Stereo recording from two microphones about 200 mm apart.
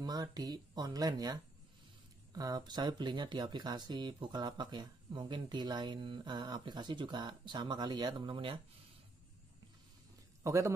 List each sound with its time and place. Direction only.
0.0 s speech: 20° right (ahead or behind)
10.4 s a man's voice: 15° right (ahead or behind)